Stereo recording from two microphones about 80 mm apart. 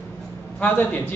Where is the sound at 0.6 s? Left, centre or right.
Left.